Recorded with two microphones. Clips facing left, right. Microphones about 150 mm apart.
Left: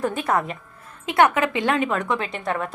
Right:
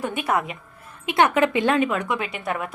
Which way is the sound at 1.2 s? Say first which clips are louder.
Even; 20° right (ahead or behind).